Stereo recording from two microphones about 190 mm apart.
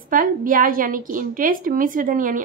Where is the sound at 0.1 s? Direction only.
45° right (ahead or behind).